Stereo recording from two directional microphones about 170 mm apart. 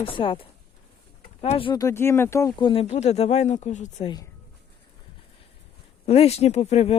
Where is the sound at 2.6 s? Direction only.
35° left (ahead or behind).